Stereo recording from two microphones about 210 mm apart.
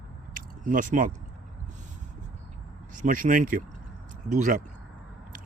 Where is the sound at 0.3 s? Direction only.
40° right (ahead or behind).